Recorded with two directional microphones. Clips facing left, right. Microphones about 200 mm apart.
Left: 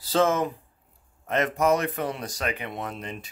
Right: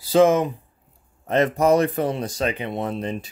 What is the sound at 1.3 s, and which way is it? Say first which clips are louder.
Speech: right 5 dB; 30° right (ahead or behind).